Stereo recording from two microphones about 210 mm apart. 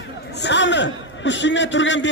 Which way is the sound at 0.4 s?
55° left (ahead or behind).